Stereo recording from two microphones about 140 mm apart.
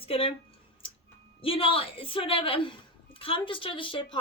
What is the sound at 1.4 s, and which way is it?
Speech, 40° left (ahead or behind).